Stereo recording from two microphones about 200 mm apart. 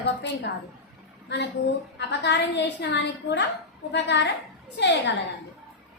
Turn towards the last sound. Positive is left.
turn(degrees=65)  # may be behind; listen again after turning